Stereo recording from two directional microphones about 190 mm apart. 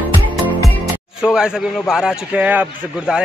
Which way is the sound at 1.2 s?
5° right (ahead or behind).